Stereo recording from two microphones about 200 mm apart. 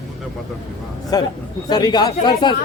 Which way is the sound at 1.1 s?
20° left (ahead or behind).